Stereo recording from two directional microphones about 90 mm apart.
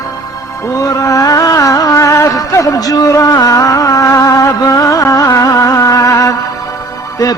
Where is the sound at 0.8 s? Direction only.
40° left (ahead or behind).